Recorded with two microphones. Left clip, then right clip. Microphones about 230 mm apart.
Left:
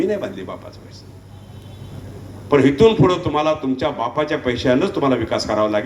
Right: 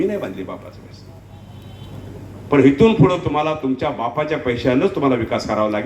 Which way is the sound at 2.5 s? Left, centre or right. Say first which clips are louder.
Even; left.